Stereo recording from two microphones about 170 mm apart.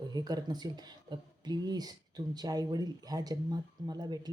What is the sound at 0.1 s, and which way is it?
Speech, 25° right (ahead or behind).